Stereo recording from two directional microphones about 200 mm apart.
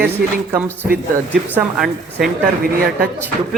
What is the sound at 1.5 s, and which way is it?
Speech, centre (ahead or behind).